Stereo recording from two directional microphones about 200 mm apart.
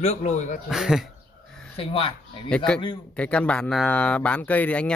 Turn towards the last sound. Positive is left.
turn(degrees=5)  # may be behind; listen again after turning